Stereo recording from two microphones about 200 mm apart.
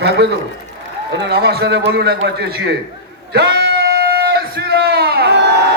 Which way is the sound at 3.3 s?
55° right (ahead or behind).